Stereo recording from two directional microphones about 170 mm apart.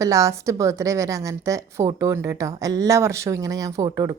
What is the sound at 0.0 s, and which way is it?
A woman's voice, 20° right (ahead or behind).